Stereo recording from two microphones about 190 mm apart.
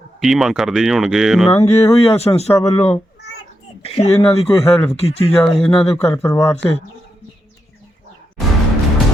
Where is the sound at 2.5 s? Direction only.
15° left (ahead or behind).